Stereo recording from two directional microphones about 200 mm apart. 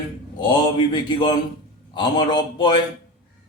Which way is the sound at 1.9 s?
20° left (ahead or behind).